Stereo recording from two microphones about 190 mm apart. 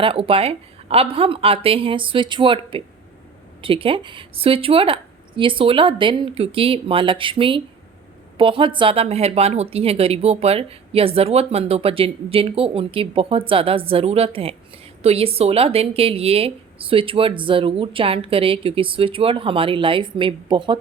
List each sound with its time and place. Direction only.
0.0 s a woman's voice: 30° right (ahead or behind)